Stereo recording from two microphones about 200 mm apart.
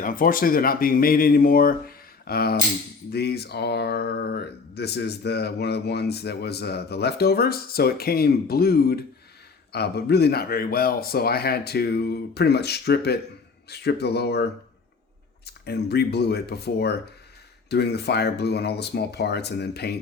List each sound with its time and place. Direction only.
0.0 s speech: 45° left (ahead or behind)
15.4 s speech: 55° left (ahead or behind)